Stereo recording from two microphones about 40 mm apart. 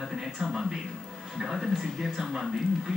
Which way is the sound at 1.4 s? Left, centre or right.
Centre.